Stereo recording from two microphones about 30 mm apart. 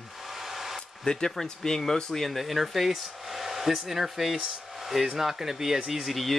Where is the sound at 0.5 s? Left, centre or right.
Centre.